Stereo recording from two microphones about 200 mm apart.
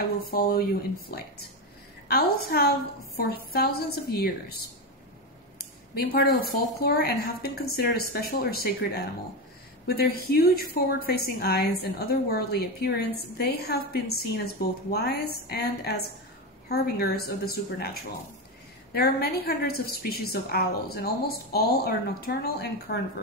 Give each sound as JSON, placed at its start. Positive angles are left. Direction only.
{"t": 2.0, "sound": "a woman's voice", "side_deg": 50}
{"t": 5.6, "sound": "a woman's voice", "side_deg": 50}
{"t": 18.9, "sound": "a woman's voice", "side_deg": 50}